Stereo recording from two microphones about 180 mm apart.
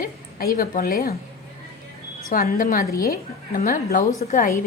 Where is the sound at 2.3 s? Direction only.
55° left (ahead or behind).